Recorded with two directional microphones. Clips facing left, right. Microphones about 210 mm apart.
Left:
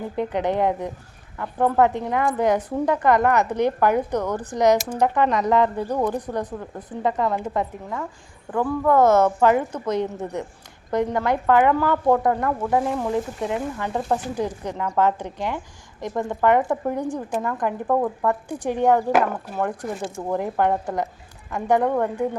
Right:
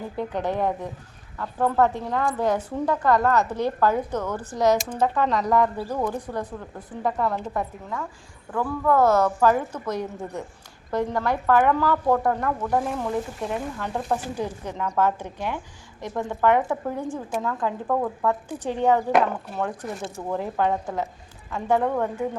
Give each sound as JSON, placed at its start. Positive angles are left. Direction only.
{"t": 0.2, "sound": "a woman's voice", "side_deg": 20}
{"t": 21.8, "sound": "a woman's voice", "side_deg": 5}